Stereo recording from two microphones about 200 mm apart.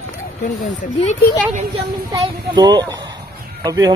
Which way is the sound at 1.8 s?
20° right (ahead or behind).